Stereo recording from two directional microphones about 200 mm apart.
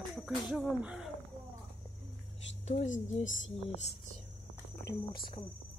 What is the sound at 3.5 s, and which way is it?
Speech, 35° left (ahead or behind).